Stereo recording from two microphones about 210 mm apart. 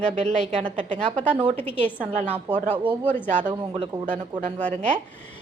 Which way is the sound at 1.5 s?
10° left (ahead or behind).